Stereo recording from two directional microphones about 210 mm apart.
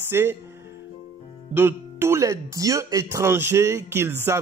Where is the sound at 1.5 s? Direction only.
10° right (ahead or behind).